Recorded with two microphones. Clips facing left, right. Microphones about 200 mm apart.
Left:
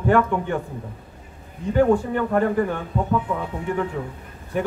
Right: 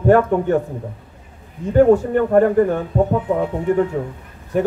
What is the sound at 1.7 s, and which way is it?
Speech, 45° right (ahead or behind).